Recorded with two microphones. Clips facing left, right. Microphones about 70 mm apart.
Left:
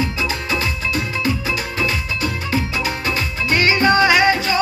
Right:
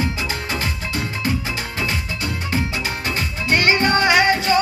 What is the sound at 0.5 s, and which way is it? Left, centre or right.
Music, right.